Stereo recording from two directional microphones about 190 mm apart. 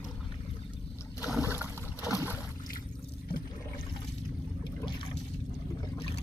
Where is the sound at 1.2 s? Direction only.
5° right (ahead or behind).